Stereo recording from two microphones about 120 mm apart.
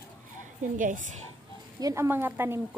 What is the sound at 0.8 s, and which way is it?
Speech, 90° right.